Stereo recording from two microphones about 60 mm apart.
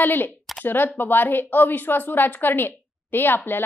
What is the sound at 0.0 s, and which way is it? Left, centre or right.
A woman's voice, left.